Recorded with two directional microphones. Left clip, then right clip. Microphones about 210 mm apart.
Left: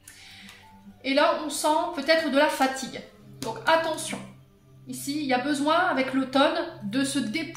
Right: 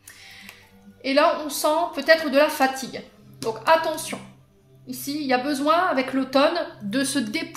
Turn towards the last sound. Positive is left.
turn(degrees=-45)  # may be behind; listen again after turning